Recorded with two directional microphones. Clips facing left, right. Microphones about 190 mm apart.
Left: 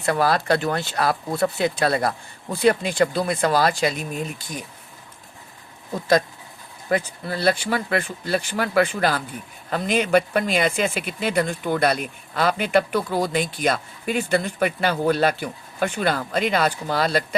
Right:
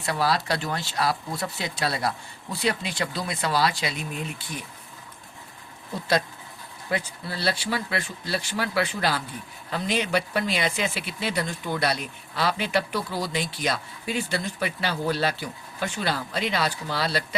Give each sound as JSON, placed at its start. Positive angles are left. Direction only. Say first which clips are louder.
{"t": 0.0, "sound": "speech", "louder": "left 5 dB", "side_deg": 50}
{"t": 6.9, "sound": "speech", "louder": "left 6 dB", "side_deg": 50}